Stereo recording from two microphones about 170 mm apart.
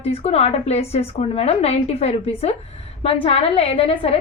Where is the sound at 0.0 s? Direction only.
35° left (ahead or behind).